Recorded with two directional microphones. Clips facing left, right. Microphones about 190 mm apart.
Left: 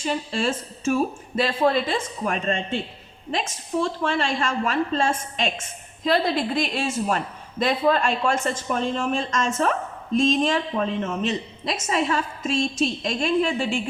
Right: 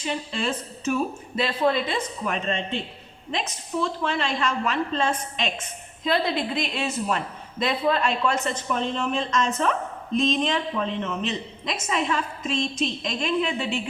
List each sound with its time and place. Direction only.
0.0 s a woman's voice: 45° left (ahead or behind)